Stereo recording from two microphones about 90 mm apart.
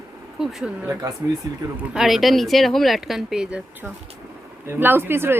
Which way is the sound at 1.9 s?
5° right (ahead or behind).